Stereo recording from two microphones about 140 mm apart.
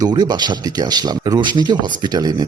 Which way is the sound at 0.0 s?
30° right (ahead or behind).